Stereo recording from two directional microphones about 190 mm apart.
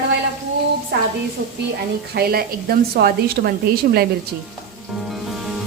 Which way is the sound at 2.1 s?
55° right (ahead or behind).